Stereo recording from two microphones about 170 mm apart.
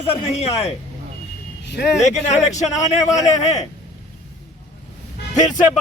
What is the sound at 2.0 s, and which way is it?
A man's voice, 40° left (ahead or behind).